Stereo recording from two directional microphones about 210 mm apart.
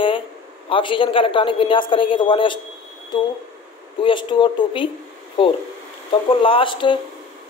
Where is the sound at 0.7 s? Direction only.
25° left (ahead or behind).